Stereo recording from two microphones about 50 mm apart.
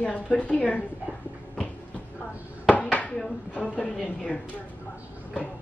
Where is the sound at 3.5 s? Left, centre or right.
Left.